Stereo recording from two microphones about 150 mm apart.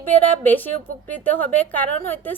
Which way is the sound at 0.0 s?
10° left (ahead or behind).